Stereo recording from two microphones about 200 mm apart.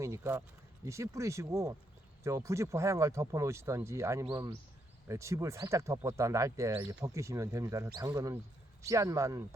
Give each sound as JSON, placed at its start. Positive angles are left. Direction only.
{"t": 0.0, "sound": "speech", "side_deg": -15}